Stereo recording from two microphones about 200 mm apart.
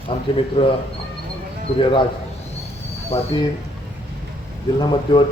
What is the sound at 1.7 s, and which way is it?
Speech, 25° left (ahead or behind).